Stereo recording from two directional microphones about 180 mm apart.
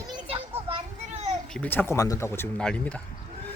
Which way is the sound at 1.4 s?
5° left (ahead or behind).